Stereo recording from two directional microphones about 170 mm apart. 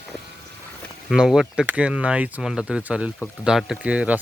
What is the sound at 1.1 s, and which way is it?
Speech, 5° right (ahead or behind).